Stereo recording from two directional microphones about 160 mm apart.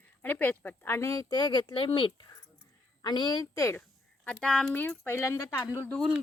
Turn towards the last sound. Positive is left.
turn(degrees=5)  # may be behind; listen again after turning